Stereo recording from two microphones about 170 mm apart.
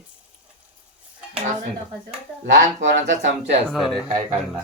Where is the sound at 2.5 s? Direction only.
45° right (ahead or behind).